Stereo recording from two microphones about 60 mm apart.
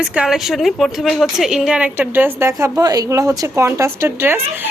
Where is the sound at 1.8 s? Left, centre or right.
Right.